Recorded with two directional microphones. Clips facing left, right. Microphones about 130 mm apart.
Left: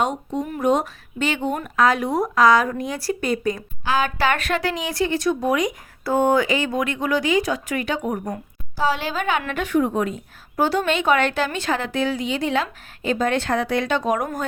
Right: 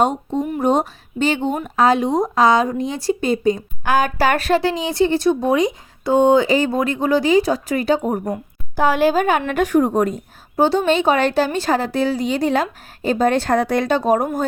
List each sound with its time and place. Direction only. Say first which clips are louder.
0.4 s speech: right 2 dB; 25° right (ahead or behind)
3.8 s a woman's voice: right 4 dB; 45° right (ahead or behind)
8.7 s a woman's voice: right 7 dB; 50° right (ahead or behind)
10.6 s a woman's voice: right 5 dB; 25° right (ahead or behind)